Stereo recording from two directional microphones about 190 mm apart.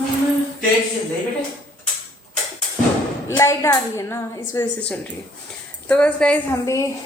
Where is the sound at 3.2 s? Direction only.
15° left (ahead or behind).